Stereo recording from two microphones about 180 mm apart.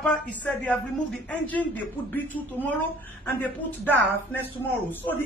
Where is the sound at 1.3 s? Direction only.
10° left (ahead or behind).